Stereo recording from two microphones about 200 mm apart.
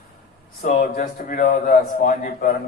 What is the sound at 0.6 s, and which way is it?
A man's voice, 35° left (ahead or behind).